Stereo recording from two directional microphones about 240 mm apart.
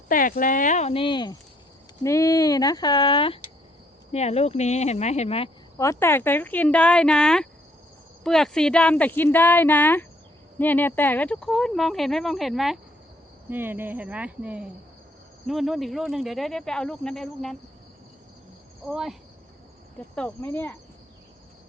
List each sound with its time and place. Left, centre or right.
0.1 s speech: left
5.7 s speech: centre
18.9 s speech: centre
20.1 s speech: centre